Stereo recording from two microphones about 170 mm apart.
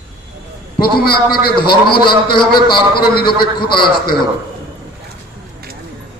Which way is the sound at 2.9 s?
65° left (ahead or behind).